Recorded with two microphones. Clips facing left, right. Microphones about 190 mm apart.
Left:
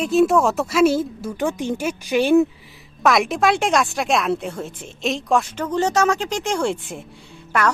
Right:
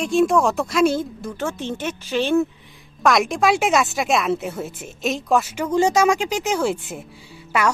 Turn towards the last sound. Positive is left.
turn(degrees=-10)  # may be behind; listen again after turning